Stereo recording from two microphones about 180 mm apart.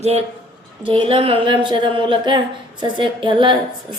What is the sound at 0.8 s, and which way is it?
Speech, 30° right (ahead or behind).